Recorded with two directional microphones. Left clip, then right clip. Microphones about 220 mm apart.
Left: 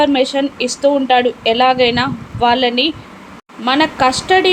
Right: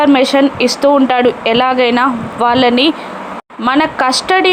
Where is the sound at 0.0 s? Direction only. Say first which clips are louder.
Right 4 dB; 15° right (ahead or behind).